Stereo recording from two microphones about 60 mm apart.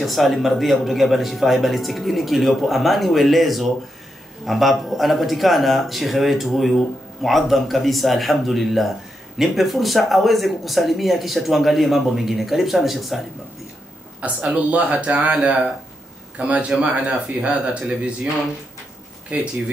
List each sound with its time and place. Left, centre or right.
0.0 s speech: centre
14.2 s speech: right
19.3 s speech: right